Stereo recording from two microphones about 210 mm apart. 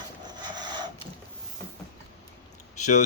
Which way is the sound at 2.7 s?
35° left (ahead or behind).